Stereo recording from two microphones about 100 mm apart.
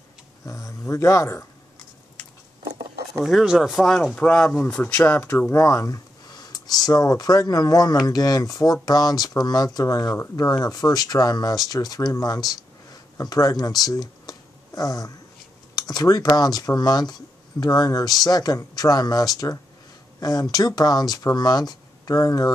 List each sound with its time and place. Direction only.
0.5 s speech: 30° left (ahead or behind)
3.3 s speech: 5° right (ahead or behind); by 12.4 s 40° left (ahead or behind)
12.4 s a sound: 40° left (ahead or behind)
15.7 s speech: 40° left (ahead or behind)